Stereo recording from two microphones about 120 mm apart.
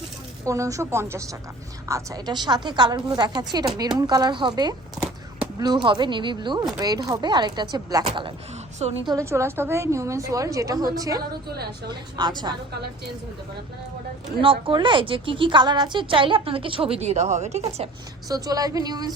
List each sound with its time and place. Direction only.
0.4 s a woman's voice: 25° right (ahead or behind)
5.0 s a sound: 10° right (ahead or behind)
5.5 s a woman's voice: 35° right (ahead or behind)
9.0 s a woman's voice: 25° right (ahead or behind)
14.4 s a woman's voice: 45° right (ahead or behind); by 17.8 s 65° right (ahead or behind)
18.3 s a woman's voice: 30° right (ahead or behind)